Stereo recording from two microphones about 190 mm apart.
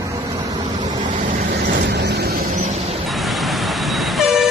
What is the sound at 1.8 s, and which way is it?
Vehicle, 60° right (ahead or behind).